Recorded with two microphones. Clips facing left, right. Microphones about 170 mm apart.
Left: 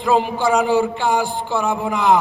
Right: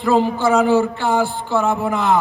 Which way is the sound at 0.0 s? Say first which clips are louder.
Right 1 dB; 15° left (ahead or behind).